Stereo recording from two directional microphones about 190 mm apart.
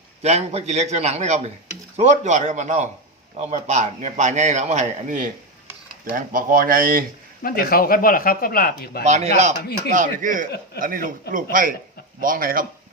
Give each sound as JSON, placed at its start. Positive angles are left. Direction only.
{"t": 0.2, "sound": "a man's voice", "side_deg": -35}
{"t": 7.4, "sound": "speech", "side_deg": 50}
{"t": 9.0, "sound": "a man's voice", "side_deg": -35}